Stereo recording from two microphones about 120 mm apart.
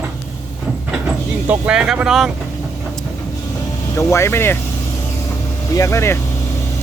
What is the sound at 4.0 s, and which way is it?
Speech, 20° left (ahead or behind).